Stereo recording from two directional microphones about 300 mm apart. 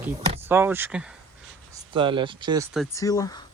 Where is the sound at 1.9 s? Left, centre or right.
Centre.